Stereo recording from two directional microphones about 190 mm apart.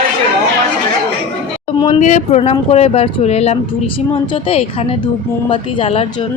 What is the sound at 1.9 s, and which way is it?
Speech, 40° left (ahead or behind).